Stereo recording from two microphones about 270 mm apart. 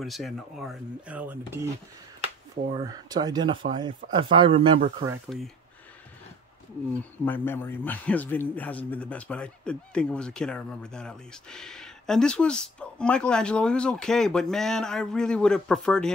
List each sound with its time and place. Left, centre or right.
0.0 s a man's voice: centre
7.2 s a man's voice: centre